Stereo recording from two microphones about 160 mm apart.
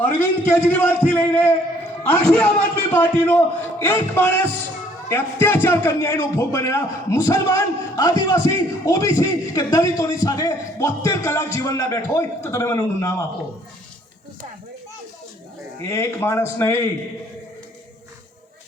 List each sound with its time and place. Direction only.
0.0 s a man's voice: 10° left (ahead or behind)
15.9 s a man's voice: 15° left (ahead or behind)